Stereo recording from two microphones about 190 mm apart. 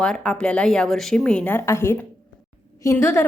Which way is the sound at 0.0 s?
5° left (ahead or behind).